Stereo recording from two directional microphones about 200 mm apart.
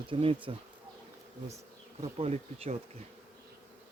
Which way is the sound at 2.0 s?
30° right (ahead or behind).